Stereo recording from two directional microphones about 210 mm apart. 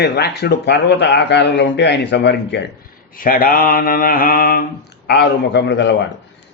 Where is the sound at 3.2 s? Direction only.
40° left (ahead or behind).